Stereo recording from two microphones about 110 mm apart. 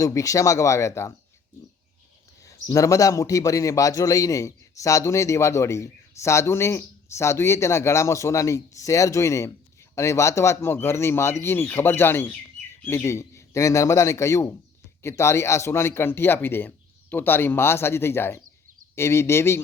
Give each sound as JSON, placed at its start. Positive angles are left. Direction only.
{"t": 0.0, "sound": "a man's voice", "side_deg": 30}
{"t": 2.4, "sound": "a man's voice", "side_deg": 30}